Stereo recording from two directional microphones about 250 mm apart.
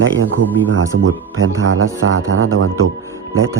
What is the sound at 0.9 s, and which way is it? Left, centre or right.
Speech, right.